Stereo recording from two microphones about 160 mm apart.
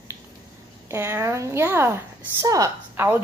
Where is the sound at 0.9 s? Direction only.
15° right (ahead or behind).